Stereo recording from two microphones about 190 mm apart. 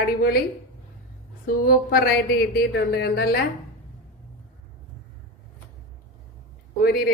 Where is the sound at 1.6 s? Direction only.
50° left (ahead or behind).